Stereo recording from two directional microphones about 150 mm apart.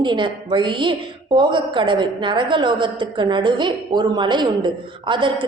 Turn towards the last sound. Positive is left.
turn(degrees=-30)  # may be behind; listen again after turning